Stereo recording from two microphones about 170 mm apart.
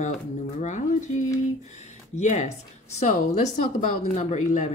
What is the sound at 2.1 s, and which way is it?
Speech, 45° left (ahead or behind).